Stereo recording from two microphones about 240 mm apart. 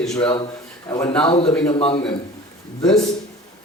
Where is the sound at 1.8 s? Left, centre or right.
Left.